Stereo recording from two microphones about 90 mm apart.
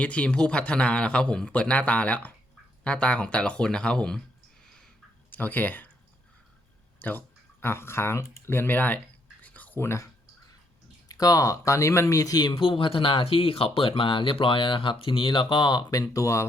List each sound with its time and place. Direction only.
0.0 s a man's voice: 15° left (ahead or behind)
5.3 s speech: 20° left (ahead or behind)
7.0 s speech: 20° left (ahead or behind)
9.4 s a sound: 20° left (ahead or behind)
11.1 s speech: 45° left (ahead or behind)
12.5 s speech: 85° left; by 16.5 s 35° left (ahead or behind)